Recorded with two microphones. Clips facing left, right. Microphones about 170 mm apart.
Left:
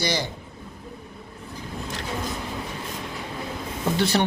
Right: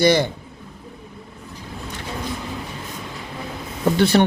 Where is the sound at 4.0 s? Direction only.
55° right (ahead or behind).